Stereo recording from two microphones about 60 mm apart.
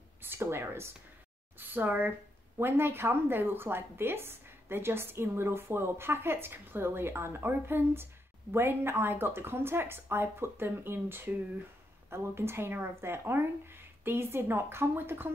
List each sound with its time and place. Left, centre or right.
0.2 s speech: right
1.6 s a woman's voice: right